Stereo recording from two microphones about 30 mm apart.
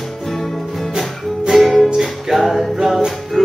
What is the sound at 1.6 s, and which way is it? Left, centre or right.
Music, centre.